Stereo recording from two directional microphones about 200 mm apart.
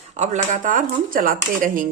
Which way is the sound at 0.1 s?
35° right (ahead or behind).